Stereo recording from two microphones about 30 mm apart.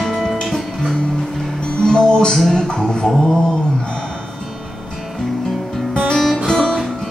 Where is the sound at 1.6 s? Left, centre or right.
Left.